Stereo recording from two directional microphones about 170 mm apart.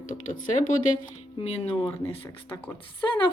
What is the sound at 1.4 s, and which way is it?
Speech, 35° left (ahead or behind).